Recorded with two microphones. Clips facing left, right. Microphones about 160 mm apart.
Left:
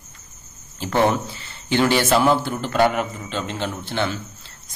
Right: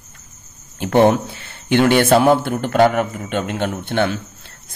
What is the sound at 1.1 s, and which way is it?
A man's voice, 55° right (ahead or behind).